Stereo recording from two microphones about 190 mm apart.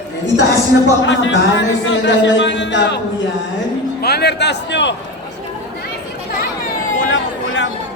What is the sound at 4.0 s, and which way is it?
Speech, 55° left (ahead or behind).